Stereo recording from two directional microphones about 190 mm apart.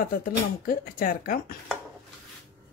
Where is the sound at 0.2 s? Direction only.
50° left (ahead or behind).